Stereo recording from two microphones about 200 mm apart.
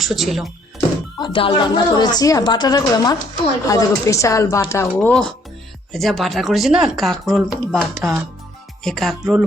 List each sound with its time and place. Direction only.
0.0 s speech: centre (ahead or behind)
1.2 s a woman's voice: 25° left (ahead or behind); by 9.4 s centre (ahead or behind)